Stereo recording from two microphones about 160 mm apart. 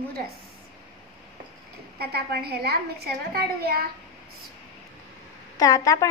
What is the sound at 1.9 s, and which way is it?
A woman's voice, 80° right.